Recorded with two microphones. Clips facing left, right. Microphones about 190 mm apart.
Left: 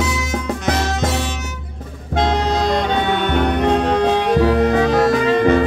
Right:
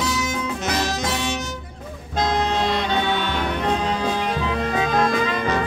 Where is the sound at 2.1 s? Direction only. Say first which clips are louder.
Left 4 dB; 30° left (ahead or behind).